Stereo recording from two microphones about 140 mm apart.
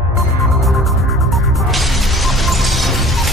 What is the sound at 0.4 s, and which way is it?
Music, centre (ahead or behind).